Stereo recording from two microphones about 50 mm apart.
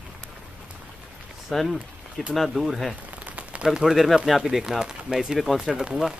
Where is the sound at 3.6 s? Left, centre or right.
Centre.